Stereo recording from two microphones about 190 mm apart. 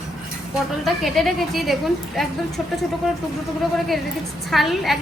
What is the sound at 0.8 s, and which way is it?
A woman's voice, centre (ahead or behind).